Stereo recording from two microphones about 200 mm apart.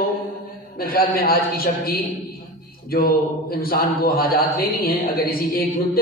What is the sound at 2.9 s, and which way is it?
A man's voice, 50° left (ahead or behind).